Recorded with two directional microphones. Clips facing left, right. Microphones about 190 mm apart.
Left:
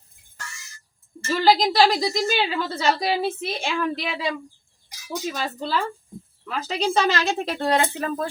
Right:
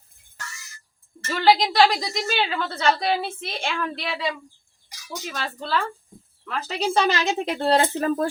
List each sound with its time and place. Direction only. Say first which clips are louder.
1.3 s a woman's voice: even; 5° left (ahead or behind)
5.3 s a woman's voice: right 1 dB; 5° left (ahead or behind)
7.1 s a woman's voice: even; 15° right (ahead or behind)
7.7 s speech: right 3 dB; 40° right (ahead or behind)